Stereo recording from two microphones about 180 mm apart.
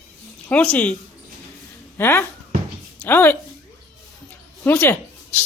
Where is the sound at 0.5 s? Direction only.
10° left (ahead or behind).